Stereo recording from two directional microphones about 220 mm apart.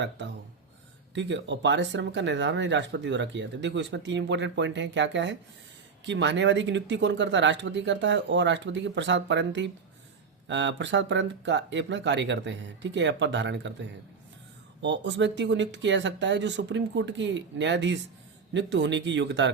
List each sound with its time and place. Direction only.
0.0 s speech: 55° right (ahead or behind)